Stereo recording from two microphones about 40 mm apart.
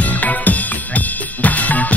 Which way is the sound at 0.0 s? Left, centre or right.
Left.